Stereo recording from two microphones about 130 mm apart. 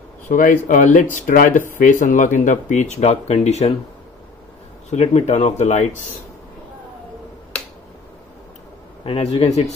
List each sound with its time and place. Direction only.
0.3 s speech: 90° left; by 3.7 s 55° left (ahead or behind)
4.9 s speech: 60° left (ahead or behind)
9.0 s a man's voice: 50° left (ahead or behind)